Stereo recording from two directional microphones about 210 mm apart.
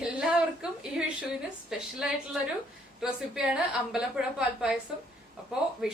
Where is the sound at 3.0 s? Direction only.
5° right (ahead or behind).